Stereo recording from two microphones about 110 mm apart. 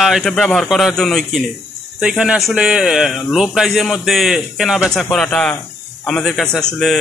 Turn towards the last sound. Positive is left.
turn(degrees=5)  # may be behind; listen again after turning